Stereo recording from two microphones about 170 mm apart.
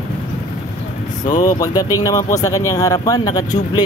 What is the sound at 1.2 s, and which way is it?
Speech, 25° left (ahead or behind).